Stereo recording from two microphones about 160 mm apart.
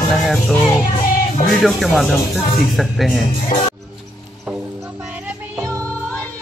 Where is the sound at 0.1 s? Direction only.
Centre (ahead or behind).